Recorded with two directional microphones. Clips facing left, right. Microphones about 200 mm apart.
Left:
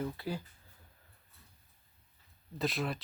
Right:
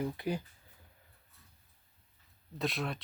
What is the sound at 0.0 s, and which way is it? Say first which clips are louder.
Speech: right 3 dB; 20° right (ahead or behind).